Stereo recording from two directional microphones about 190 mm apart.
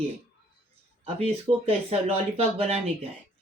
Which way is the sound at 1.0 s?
30° right (ahead or behind).